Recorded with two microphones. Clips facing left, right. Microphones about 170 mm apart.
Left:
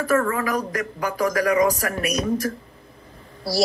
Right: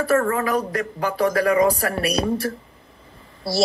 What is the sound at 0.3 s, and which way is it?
A woman's voice, 30° right (ahead or behind).